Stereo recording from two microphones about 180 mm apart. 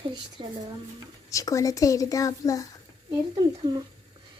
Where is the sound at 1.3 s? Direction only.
15° left (ahead or behind).